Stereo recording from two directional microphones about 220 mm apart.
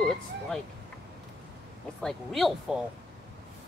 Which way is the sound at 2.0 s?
Centre (ahead or behind).